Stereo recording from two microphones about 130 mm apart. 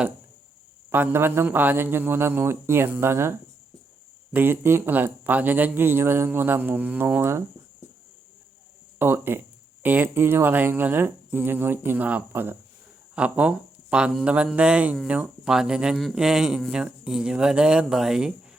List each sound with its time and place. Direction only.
0.9 s speech: 15° right (ahead or behind)
9.0 s speech: 20° right (ahead or behind)